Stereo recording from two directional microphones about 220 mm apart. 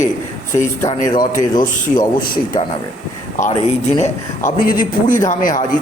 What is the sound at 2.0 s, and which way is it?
Speech, 40° left (ahead or behind).